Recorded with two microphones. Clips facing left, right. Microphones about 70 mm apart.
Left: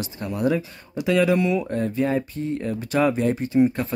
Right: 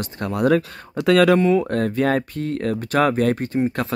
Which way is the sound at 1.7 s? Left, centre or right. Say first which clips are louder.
Right 3 dB; right.